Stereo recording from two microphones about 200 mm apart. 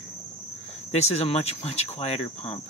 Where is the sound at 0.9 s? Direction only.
35° left (ahead or behind).